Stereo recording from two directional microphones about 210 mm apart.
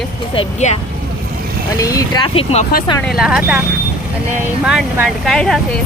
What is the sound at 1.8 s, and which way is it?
Speech, 15° left (ahead or behind).